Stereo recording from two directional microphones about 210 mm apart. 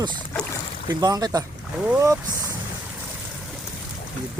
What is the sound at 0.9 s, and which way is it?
Speech, 20° right (ahead or behind).